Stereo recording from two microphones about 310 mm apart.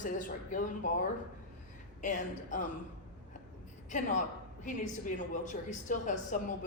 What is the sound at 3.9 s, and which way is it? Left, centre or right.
Speech, left.